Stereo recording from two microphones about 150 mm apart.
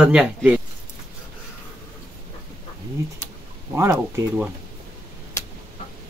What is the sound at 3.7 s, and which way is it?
Speech, 15° right (ahead or behind).